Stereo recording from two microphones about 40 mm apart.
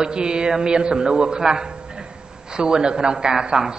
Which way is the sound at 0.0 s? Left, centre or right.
Right.